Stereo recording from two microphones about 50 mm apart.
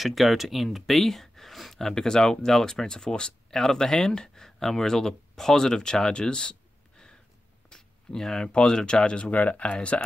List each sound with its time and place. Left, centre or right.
0.0 s speech: centre
7.7 s speech: centre
9.3 s speech: left
9.8 s speech: centre